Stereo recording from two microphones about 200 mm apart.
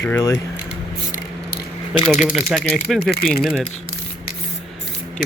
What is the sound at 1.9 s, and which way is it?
Speech, 25° left (ahead or behind).